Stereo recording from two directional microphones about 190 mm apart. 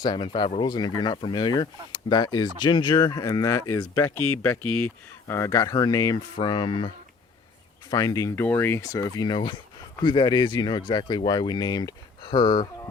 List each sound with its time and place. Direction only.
0.0 s speech: 25° left (ahead or behind)